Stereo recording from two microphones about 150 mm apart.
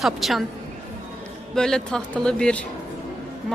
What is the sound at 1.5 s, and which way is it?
A woman's voice, 5° left (ahead or behind).